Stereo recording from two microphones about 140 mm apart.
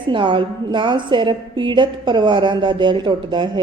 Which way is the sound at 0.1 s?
35° right (ahead or behind).